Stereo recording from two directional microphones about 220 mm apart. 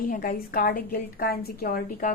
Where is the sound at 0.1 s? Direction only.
40° left (ahead or behind).